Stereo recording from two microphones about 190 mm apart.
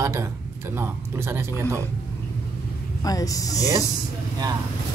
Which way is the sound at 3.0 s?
20° left (ahead or behind).